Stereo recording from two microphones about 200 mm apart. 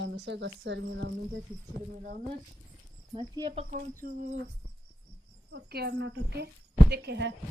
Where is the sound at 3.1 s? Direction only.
20° right (ahead or behind).